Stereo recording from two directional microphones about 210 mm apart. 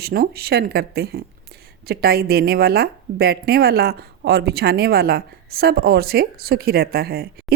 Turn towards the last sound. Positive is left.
turn(degrees=-45)  # may be behind; listen again after turning